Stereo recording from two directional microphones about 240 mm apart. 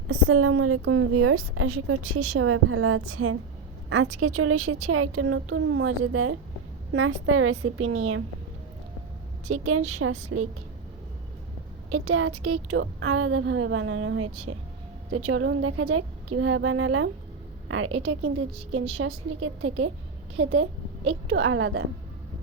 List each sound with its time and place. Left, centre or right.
0.1 s a woman's voice: right
9.5 s a woman's voice: right
11.9 s a woman's voice: right